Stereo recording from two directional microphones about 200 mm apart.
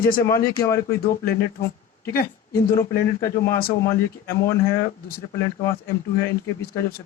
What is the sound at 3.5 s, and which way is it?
Speech, 50° left (ahead or behind).